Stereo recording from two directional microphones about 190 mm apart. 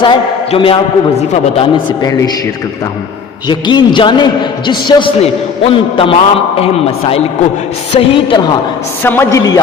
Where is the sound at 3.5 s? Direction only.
25° left (ahead or behind).